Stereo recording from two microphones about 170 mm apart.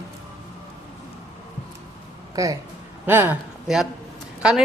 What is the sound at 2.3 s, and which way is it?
Speech, 20° right (ahead or behind).